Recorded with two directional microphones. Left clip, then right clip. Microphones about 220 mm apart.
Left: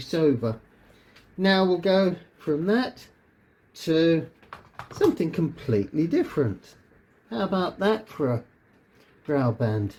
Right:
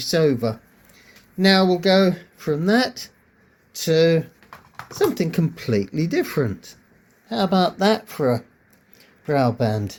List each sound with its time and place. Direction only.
0.1 s speech: 55° right (ahead or behind)